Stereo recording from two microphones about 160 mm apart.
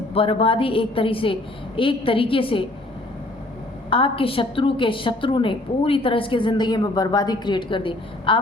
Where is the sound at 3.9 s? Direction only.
35° left (ahead or behind).